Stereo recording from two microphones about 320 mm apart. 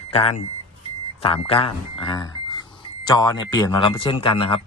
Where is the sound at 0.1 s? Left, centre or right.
Centre.